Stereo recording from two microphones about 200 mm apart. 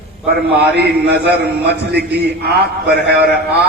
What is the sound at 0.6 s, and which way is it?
A man's voice, 55° right (ahead or behind).